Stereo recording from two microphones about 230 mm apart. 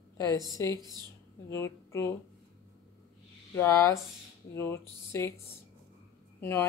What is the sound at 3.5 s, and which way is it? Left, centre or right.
Speech, centre.